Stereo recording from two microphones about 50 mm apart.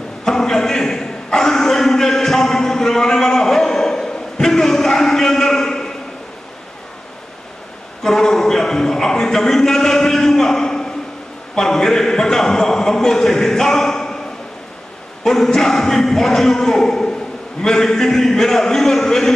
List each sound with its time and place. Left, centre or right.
0.2 s a sound: centre
8.0 s speech: centre
15.2 s speech: centre